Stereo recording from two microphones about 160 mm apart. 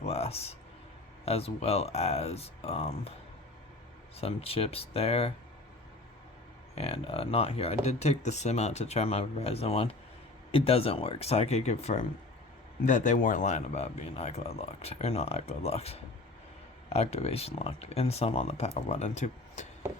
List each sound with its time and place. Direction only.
0.0 s a sound: 40° left (ahead or behind)
1.2 s speech: 40° left (ahead or behind)
4.2 s speech: 40° left (ahead or behind)
6.7 s speech: 40° left (ahead or behind)